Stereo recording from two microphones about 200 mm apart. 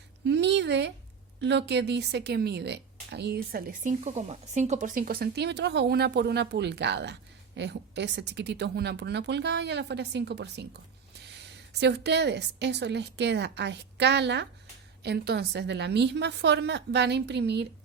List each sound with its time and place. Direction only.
0.3 s a sound: 60° right (ahead or behind)
1.4 s speech: 60° right (ahead or behind)
11.8 s speech: 60° right (ahead or behind)